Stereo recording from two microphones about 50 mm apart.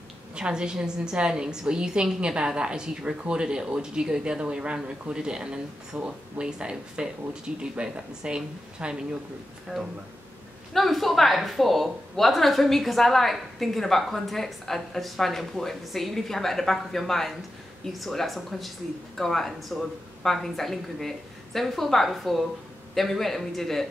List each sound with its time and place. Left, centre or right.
0.4 s a woman's voice: centre
10.7 s a woman's voice: centre